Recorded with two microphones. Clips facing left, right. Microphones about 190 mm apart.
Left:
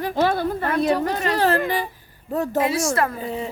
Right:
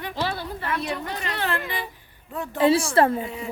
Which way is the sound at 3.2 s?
30° left (ahead or behind).